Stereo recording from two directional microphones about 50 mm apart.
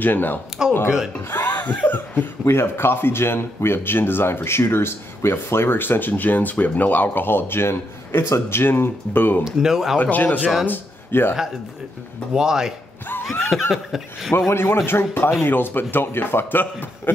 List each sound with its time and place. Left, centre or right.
0.0 s speech: left
0.8 s speech: centre
1.3 s speech: left
2.4 s speech: left
9.4 s speech: centre
9.9 s speech: left
10.7 s speech: left
12.4 s speech: centre
14.5 s speech: left